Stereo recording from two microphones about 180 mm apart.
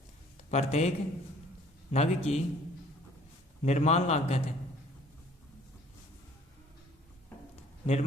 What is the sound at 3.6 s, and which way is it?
Speech, 40° left (ahead or behind).